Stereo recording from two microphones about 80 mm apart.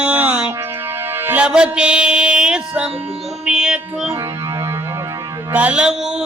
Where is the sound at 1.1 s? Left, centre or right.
Right.